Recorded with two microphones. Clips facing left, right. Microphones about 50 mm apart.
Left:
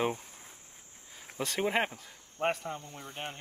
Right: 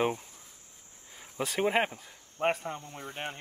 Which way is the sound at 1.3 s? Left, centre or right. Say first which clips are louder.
Right 2 dB; centre.